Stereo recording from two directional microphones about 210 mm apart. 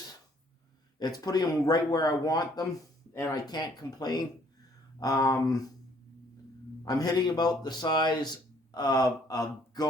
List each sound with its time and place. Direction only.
0.9 s a man's voice: 20° left (ahead or behind)
6.8 s a man's voice: 15° left (ahead or behind)